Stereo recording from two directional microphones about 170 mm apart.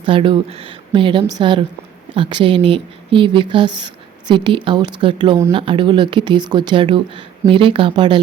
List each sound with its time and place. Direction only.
0.0 s speech: 30° right (ahead or behind)